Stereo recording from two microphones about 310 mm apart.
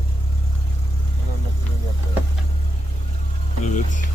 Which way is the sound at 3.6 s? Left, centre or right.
Left.